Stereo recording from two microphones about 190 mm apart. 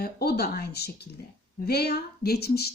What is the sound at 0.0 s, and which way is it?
Speech, 55° left (ahead or behind).